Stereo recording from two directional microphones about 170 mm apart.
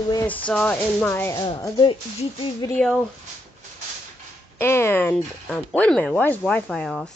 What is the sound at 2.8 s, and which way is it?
Speech, 5° left (ahead or behind).